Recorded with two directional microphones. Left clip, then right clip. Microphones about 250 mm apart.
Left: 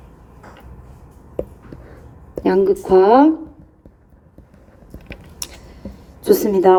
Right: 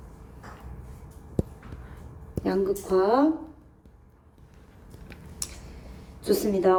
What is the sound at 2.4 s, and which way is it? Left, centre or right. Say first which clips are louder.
Speech: left 11 dB; left.